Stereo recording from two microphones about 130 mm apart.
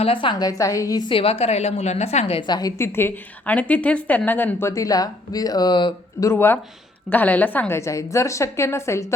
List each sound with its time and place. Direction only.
0.0 s a woman's voice: 40° left (ahead or behind)
2.5 s a woman's voice: 30° left (ahead or behind)
6.3 s a woman's voice: 15° left (ahead or behind)